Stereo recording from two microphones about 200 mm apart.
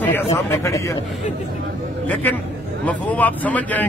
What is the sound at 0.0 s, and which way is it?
Speech, 10° left (ahead or behind).